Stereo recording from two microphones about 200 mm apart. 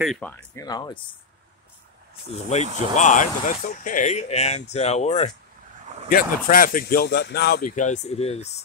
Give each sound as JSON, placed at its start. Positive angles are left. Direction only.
{"t": 0.0, "sound": "speech", "side_deg": 0}
{"t": 0.3, "sound": "speech", "side_deg": 20}
{"t": 3.0, "sound": "speech", "side_deg": 40}
{"t": 6.0, "sound": "speech", "side_deg": 45}